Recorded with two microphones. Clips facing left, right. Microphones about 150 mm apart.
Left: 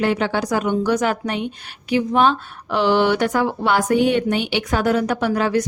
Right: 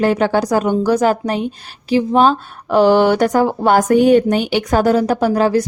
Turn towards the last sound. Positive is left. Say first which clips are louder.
# right 5 dB
turn(degrees=-35)  # may be behind; listen again after turning